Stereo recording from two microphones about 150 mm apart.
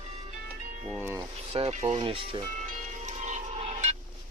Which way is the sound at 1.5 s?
45° right (ahead or behind).